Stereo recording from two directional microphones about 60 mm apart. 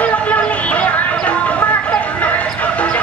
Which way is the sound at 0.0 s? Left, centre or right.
Left.